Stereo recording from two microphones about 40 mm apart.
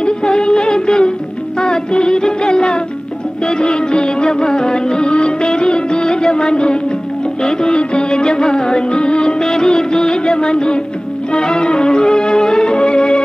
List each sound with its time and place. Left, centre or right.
0.0 s music: left